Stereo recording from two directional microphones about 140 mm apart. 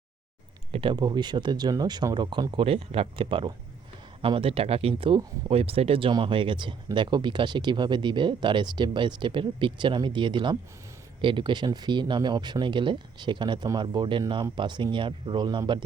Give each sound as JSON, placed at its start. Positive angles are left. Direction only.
{"t": 0.7, "sound": "speech", "side_deg": -40}